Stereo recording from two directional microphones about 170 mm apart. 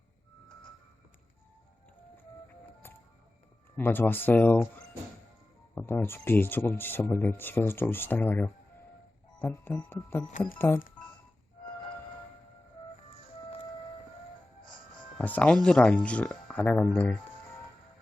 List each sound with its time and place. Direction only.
3.8 s speech: 10° left (ahead or behind)
5.7 s speech: 15° left (ahead or behind)
14.6 s music: 25° left (ahead or behind)
15.2 s speech: 10° left (ahead or behind)